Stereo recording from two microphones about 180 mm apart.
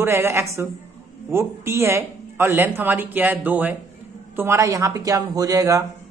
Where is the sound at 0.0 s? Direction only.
15° right (ahead or behind).